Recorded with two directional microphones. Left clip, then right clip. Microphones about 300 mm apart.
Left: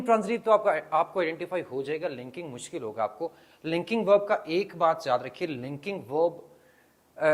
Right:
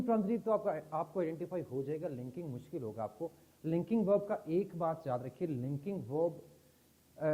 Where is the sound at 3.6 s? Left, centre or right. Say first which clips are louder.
Left 7 dB; centre.